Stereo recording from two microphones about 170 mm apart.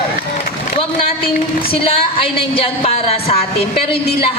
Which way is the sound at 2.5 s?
35° left (ahead or behind).